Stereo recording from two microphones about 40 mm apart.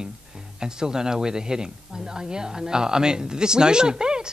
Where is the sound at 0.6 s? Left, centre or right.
Centre.